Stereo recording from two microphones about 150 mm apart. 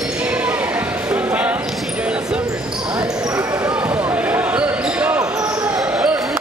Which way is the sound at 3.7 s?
10° right (ahead or behind).